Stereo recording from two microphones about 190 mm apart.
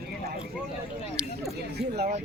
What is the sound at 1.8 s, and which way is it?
Speech, 60° right (ahead or behind).